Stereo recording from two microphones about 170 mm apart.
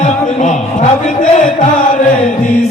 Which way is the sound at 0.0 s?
45° left (ahead or behind).